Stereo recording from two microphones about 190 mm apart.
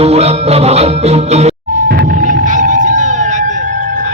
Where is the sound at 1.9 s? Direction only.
50° right (ahead or behind).